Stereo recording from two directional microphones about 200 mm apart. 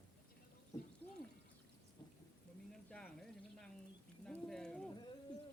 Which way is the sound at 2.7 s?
5° left (ahead or behind).